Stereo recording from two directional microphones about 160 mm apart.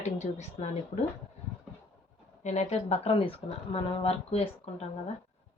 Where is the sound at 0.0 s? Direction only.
45° left (ahead or behind).